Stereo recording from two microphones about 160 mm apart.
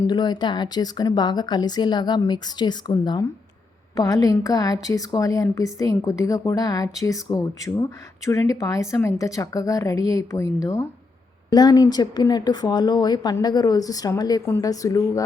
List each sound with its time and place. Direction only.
0.0 s a woman's voice: 25° left (ahead or behind)